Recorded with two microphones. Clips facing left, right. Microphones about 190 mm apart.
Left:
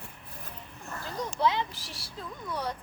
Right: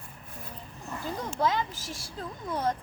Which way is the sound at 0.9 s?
15° right (ahead or behind).